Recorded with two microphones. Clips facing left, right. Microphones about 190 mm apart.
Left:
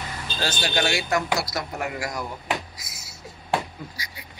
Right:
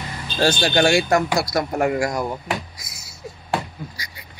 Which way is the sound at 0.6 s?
45° right (ahead or behind).